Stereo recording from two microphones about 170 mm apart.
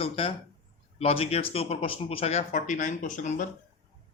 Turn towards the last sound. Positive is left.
turn(degrees=50)  # may be behind; listen again after turning